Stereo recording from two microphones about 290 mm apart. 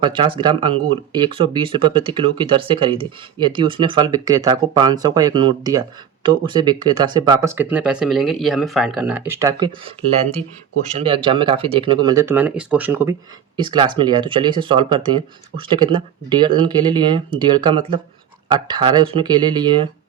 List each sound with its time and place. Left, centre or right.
0.0 s speech: centre